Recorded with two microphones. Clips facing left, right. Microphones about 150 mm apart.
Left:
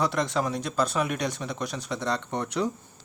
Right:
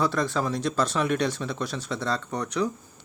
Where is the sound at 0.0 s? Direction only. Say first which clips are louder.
Right 1 dB; 20° left (ahead or behind).